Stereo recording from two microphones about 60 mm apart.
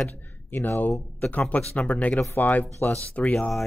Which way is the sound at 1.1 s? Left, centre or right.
Left.